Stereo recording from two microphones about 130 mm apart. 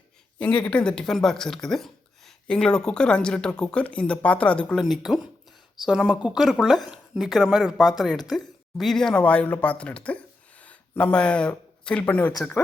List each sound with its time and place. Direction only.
0.3 s speech: 10° left (ahead or behind)